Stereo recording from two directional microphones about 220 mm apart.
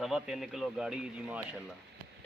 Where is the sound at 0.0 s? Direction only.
Centre (ahead or behind).